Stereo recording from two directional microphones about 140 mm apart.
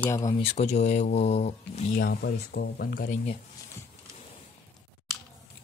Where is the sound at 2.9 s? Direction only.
90° left.